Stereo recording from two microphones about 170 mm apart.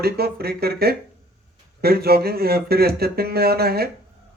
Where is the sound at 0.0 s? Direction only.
65° right (ahead or behind).